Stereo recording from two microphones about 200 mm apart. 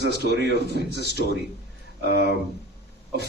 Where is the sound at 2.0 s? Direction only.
55° right (ahead or behind).